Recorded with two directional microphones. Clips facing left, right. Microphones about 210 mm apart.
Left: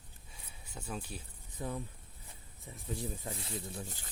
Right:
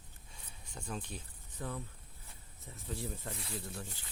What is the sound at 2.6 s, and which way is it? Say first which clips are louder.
Speech: left 2 dB; 15° left (ahead or behind).